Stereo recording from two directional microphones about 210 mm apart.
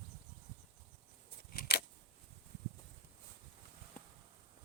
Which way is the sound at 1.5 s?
45° left (ahead or behind).